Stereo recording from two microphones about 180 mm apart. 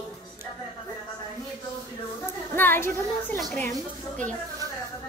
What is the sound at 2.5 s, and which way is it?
Speech, 10° left (ahead or behind).